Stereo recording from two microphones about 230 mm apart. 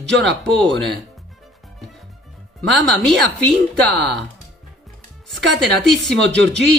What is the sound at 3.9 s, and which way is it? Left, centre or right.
Speech, right.